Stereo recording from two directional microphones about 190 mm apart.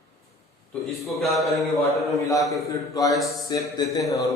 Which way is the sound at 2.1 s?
15° left (ahead or behind).